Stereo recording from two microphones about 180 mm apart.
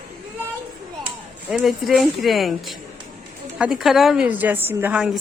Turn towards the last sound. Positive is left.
turn(degrees=-10)  # may be behind; listen again after turning